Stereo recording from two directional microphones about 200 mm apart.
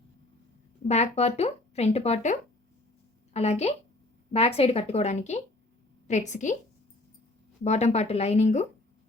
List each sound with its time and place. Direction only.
0.9 s speech: 35° left (ahead or behind)
7.6 s speech: 35° left (ahead or behind)